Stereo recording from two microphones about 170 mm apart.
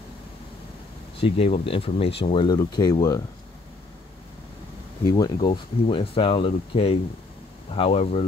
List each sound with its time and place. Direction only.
1.2 s speech: 30° left (ahead or behind)
5.0 s speech: 20° left (ahead or behind)